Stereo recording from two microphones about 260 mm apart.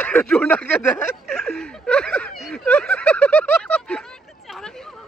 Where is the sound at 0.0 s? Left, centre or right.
Centre.